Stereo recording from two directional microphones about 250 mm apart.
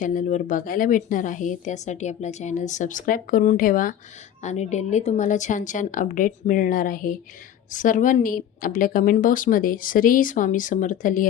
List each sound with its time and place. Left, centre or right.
0.0 s speech: left